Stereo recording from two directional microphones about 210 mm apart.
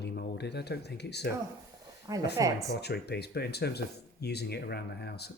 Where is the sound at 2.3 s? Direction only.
15° right (ahead or behind).